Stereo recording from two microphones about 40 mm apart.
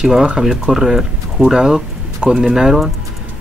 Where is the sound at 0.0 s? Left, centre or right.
Centre.